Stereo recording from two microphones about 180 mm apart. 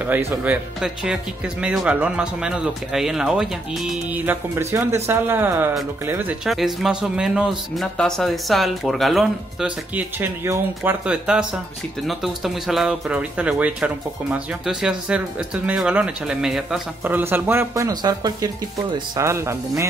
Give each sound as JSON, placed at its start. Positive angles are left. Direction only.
{"t": 0.4, "sound": "speech", "side_deg": -5}